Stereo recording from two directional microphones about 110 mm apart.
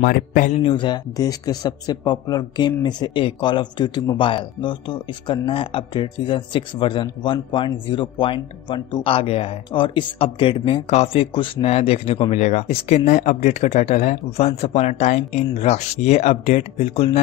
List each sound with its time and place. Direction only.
0.7 s speech: 40° left (ahead or behind); by 9.6 s 65° left (ahead or behind)
9.7 s speech: 50° left (ahead or behind)
10.9 s speech: 80° left
11.3 s speech: 60° left (ahead or behind)